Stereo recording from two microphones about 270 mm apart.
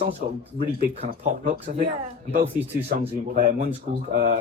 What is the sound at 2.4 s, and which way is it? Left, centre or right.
Speech, centre.